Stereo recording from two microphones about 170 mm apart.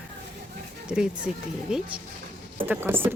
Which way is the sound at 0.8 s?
5° right (ahead or behind).